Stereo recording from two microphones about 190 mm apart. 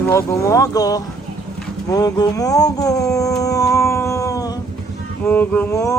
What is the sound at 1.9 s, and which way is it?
Music, 20° left (ahead or behind).